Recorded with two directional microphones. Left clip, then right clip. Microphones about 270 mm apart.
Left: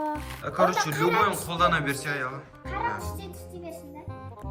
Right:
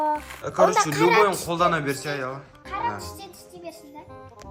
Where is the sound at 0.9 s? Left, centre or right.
Right.